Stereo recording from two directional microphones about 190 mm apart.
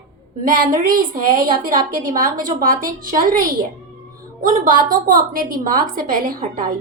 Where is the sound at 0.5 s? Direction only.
50° right (ahead or behind).